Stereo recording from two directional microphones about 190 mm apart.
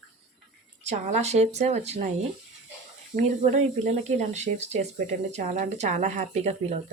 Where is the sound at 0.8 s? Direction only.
35° right (ahead or behind).